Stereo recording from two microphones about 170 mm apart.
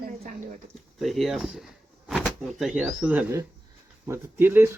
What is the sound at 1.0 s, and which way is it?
A woman's voice, centre (ahead or behind).